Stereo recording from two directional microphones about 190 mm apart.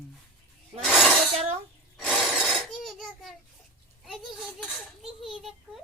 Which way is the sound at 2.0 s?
5° left (ahead or behind).